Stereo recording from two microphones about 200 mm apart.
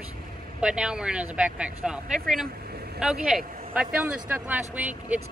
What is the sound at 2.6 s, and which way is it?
Vehicle, 50° right (ahead or behind).